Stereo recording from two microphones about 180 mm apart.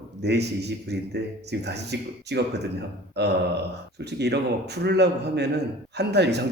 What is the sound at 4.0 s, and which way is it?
A man's voice, 70° right (ahead or behind).